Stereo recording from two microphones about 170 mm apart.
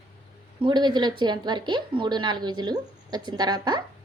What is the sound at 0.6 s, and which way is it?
A woman's voice, 25° right (ahead or behind).